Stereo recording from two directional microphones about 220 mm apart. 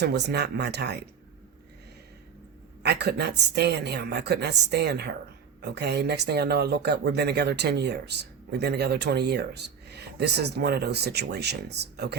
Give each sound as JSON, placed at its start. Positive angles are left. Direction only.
{"t": 0.0, "sound": "speech", "side_deg": -50}
{"t": 2.8, "sound": "speech", "side_deg": -45}